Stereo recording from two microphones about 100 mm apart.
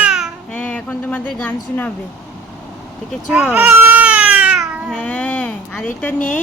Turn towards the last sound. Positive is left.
turn(degrees=15)  # may be behind; listen again after turning